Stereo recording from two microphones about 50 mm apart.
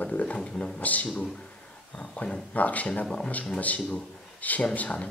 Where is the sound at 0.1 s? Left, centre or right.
Left.